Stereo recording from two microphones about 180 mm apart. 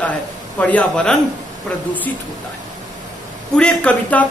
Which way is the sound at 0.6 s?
10° left (ahead or behind).